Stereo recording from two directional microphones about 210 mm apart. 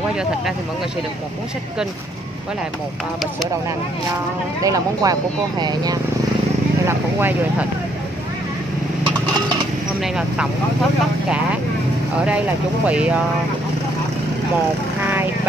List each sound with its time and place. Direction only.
4.6 s speech: 15° right (ahead or behind)
10.1 s speech: 5° right (ahead or behind)
12.8 s speech: 5° right (ahead or behind)